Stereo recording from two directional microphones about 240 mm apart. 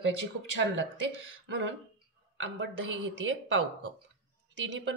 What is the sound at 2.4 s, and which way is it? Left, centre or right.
Speech, right.